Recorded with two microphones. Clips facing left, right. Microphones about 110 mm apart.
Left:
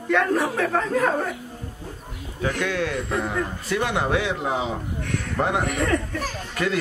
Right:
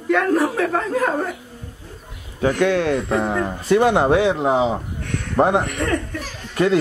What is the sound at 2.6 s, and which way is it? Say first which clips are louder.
Speech: right 9 dB; 35° right (ahead or behind).